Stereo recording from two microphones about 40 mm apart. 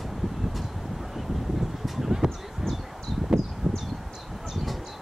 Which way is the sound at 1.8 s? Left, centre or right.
Centre.